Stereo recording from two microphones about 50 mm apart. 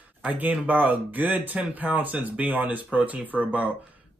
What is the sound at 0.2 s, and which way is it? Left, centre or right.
Speech, right.